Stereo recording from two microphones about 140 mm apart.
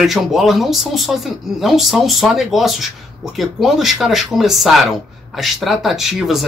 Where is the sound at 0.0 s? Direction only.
Centre (ahead or behind).